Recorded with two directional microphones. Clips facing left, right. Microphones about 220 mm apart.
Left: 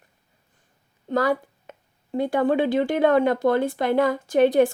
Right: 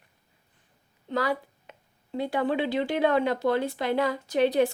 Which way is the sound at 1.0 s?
45° left (ahead or behind).